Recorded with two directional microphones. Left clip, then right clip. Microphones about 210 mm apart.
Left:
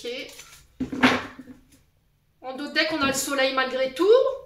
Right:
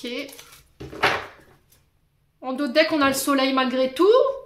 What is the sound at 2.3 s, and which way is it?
A woman's voice, 50° right (ahead or behind).